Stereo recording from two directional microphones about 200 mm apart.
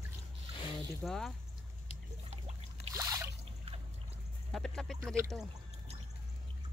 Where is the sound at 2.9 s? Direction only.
15° right (ahead or behind).